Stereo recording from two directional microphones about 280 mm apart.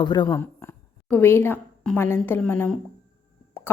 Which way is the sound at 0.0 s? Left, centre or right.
Centre.